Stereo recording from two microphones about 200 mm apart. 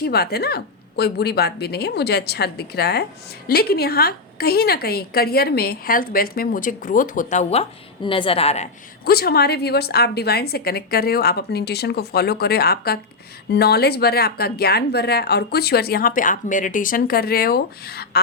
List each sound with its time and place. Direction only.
0.0 s a woman's voice: 50° left (ahead or behind); by 8.7 s 35° left (ahead or behind)
9.0 s a woman's voice: 50° left (ahead or behind)